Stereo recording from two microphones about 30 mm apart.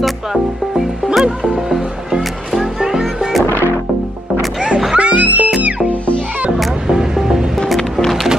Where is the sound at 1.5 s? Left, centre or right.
Centre.